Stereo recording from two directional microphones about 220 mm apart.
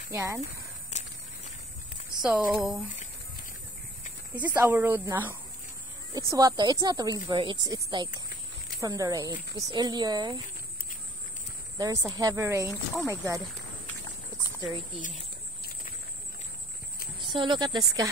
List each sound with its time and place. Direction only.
0.1 s speech: 15° right (ahead or behind)
0.4 s a sound: 30° left (ahead or behind)
2.2 s speech: 5° right (ahead or behind)
4.4 s speech: 5° right (ahead or behind)
11.8 s speech: 15° right (ahead or behind)
12.7 s speech: 15° left (ahead or behind)
13.2 s speech: 15° right (ahead or behind)
17.2 s speech: 20° right (ahead or behind)